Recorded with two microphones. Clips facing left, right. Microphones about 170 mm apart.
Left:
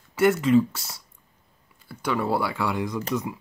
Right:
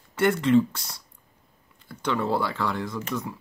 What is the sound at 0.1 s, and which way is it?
Speech, 5° left (ahead or behind).